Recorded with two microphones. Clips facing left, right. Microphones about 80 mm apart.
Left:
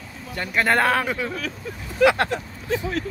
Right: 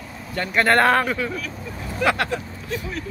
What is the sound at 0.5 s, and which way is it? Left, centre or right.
Speech, centre.